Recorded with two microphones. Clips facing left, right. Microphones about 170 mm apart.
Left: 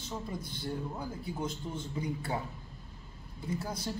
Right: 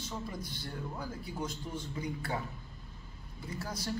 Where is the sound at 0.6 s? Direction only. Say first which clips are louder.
Left 4 dB; 20° left (ahead or behind).